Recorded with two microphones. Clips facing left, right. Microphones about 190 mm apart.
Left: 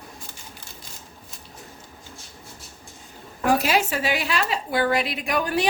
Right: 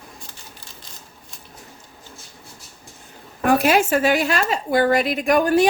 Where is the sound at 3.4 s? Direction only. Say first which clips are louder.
Right 4 dB; 55° right (ahead or behind).